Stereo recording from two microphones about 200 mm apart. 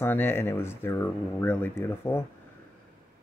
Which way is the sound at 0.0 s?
10° left (ahead or behind).